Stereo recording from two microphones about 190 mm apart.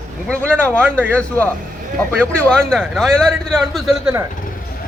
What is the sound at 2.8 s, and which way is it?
A man's voice, centre (ahead or behind).